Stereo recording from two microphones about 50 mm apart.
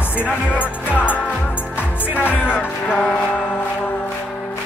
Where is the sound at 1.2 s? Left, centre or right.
Left.